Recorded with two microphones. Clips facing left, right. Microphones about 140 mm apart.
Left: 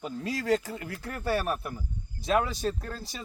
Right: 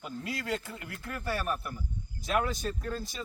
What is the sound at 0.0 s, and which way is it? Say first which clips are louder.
Speech: left 5 dB; 35° left (ahead or behind).